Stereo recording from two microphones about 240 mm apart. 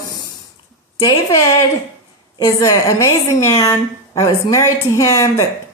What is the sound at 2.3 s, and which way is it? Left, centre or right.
A woman's voice, centre.